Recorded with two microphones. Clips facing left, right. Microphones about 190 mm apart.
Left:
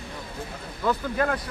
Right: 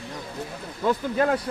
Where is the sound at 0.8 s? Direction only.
25° right (ahead or behind).